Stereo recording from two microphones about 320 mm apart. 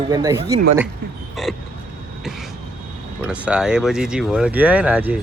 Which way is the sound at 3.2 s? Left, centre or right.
Centre.